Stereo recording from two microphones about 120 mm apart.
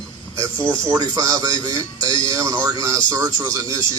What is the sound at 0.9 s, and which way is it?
A man's voice, 30° right (ahead or behind).